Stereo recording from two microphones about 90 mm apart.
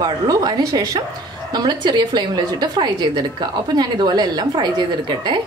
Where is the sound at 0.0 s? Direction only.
50° right (ahead or behind).